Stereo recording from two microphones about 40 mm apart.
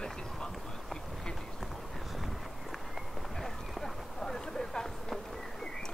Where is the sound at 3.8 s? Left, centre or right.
Centre.